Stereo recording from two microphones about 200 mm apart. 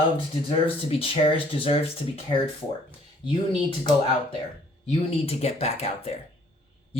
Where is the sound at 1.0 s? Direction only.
25° left (ahead or behind).